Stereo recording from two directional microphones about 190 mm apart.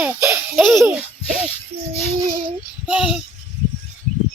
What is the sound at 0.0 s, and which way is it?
Baby laughter, 10° right (ahead or behind).